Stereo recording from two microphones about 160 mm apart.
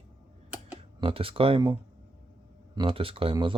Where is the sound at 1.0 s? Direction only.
35° right (ahead or behind).